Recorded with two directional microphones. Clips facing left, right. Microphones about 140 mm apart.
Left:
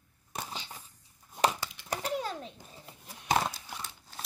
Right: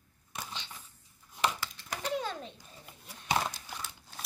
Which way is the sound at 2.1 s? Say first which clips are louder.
Even; 10° left (ahead or behind).